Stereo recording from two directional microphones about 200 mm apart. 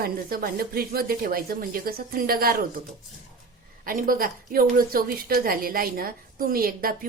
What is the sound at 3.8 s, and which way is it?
A woman's voice, 45° right (ahead or behind).